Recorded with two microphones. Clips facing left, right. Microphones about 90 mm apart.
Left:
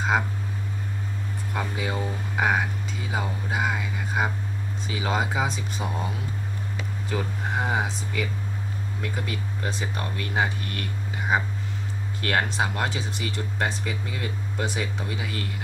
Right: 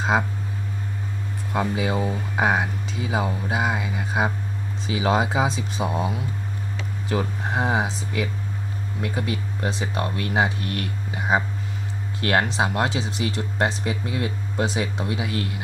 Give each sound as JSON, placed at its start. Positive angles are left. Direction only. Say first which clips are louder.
{"t": 1.5, "sound": "speech", "louder": "right 6 dB", "side_deg": -15}
{"t": 12.3, "sound": "speech", "louder": "right 3 dB", "side_deg": -20}